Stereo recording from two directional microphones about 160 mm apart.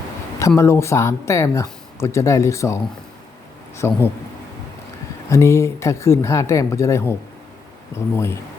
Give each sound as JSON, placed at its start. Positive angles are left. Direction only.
{"t": 0.3, "sound": "speech", "side_deg": 20}
{"t": 3.8, "sound": "speech", "side_deg": 15}
{"t": 5.3, "sound": "speech", "side_deg": 20}